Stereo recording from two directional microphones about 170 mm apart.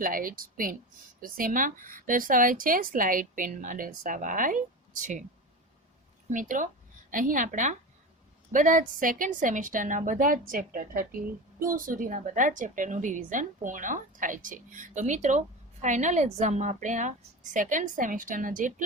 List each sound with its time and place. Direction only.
0.0 s a woman's voice: 55° right (ahead or behind)
6.3 s a woman's voice: 50° right (ahead or behind)